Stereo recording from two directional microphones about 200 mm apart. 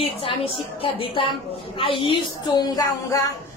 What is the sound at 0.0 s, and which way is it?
A woman's voice, 25° left (ahead or behind).